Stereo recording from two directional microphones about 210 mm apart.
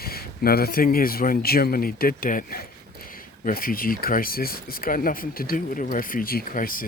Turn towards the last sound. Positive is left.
turn(degrees=40)  # may be behind; listen again after turning